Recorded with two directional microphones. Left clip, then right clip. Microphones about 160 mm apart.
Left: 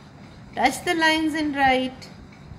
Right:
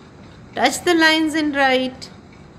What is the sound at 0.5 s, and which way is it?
Speech, 30° right (ahead or behind).